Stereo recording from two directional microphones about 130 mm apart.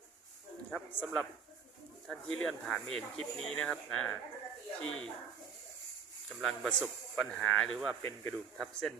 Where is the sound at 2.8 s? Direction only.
50° right (ahead or behind).